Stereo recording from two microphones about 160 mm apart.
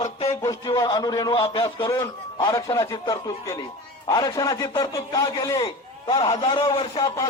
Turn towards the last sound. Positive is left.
turn(degrees=30)  # may be behind; listen again after turning